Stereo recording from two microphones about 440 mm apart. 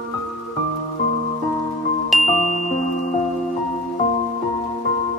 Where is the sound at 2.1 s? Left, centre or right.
Centre.